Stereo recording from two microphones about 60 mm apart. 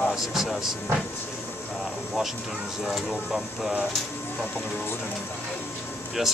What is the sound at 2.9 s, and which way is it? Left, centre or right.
Speech, centre.